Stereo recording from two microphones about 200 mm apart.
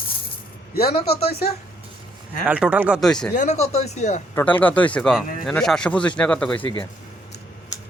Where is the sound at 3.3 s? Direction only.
35° left (ahead or behind).